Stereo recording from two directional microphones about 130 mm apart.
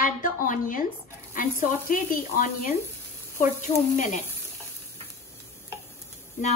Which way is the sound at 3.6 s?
70° left (ahead or behind).